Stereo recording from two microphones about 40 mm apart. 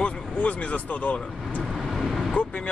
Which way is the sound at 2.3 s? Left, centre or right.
Left.